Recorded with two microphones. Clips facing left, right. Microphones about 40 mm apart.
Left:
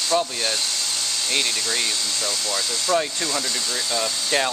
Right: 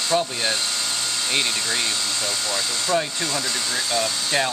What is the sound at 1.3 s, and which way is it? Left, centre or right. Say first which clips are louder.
Speech: even; centre.